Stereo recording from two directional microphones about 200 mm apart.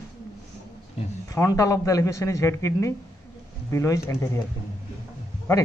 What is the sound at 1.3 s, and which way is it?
Speech, 15° left (ahead or behind).